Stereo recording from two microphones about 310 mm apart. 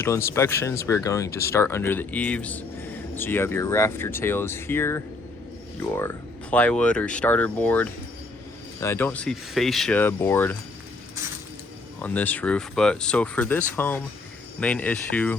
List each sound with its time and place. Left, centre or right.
0.0 s speech: centre
12.0 s speech: centre